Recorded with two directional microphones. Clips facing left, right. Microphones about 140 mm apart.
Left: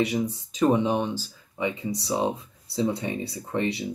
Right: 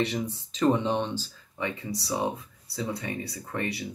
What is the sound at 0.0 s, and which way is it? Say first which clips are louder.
Speech: left 4 dB; 10° left (ahead or behind).